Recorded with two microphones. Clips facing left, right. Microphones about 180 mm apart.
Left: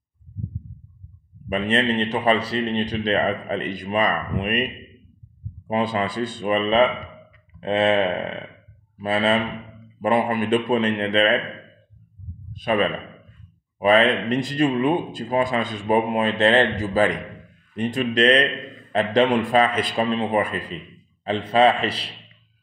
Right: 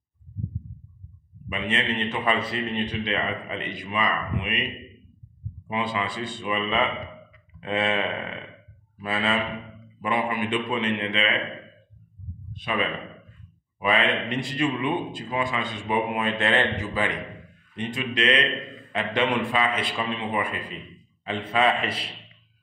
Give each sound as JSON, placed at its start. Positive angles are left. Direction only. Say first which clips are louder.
{"t": 1.5, "sound": "speech", "louder": "left 7 dB", "side_deg": 40}
{"t": 5.7, "sound": "speech", "louder": "left 5 dB", "side_deg": 45}
{"t": 12.5, "sound": "a man's voice", "louder": "left 7 dB", "side_deg": 45}